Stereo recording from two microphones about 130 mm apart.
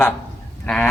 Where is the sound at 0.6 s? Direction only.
5° left (ahead or behind).